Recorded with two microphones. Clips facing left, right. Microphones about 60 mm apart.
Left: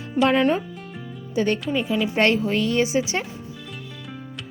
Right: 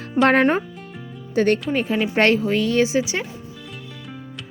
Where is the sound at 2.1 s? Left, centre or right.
Right.